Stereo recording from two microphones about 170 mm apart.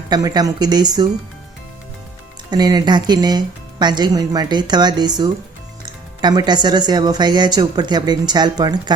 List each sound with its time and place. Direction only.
0.1 s speech: 25° right (ahead or behind)
2.5 s speech: 25° right (ahead or behind)